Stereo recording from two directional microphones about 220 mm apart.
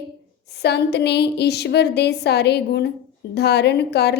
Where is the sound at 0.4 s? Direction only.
50° left (ahead or behind).